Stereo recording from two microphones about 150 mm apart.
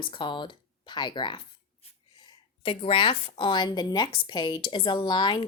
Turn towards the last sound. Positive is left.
turn(degrees=30)  # may be behind; listen again after turning